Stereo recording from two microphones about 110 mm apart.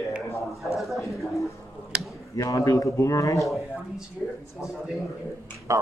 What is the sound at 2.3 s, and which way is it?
Speech, 30° left (ahead or behind).